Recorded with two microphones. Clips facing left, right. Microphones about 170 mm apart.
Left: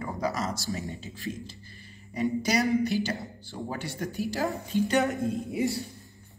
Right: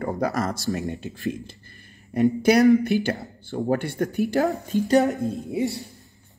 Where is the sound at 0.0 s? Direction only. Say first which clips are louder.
Right 6 dB; 55° right (ahead or behind).